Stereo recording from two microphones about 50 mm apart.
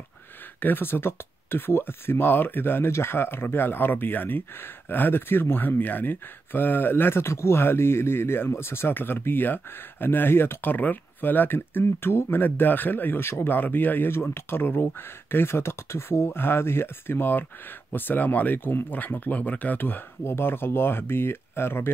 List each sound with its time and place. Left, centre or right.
0.6 s speech: left
20.2 s speech: left